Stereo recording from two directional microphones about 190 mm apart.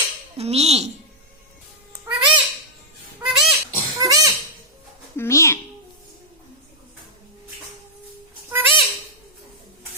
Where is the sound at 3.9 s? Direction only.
15° right (ahead or behind).